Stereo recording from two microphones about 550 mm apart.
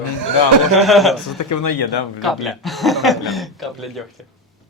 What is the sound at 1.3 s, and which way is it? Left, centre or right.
Speech, left.